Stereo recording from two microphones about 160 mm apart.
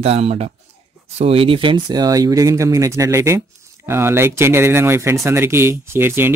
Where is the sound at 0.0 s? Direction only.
40° right (ahead or behind).